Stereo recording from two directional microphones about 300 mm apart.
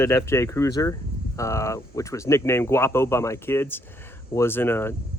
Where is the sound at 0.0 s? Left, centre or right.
Centre.